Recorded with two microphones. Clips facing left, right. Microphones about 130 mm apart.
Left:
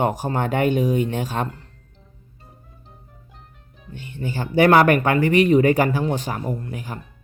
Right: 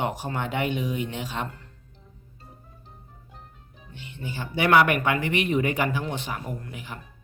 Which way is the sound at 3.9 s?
45° left (ahead or behind).